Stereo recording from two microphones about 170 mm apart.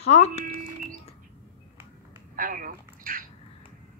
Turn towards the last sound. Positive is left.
turn(degrees=-55)  # may be behind; listen again after turning